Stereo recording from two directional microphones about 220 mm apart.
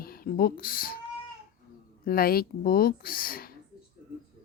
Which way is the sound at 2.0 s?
45° left (ahead or behind).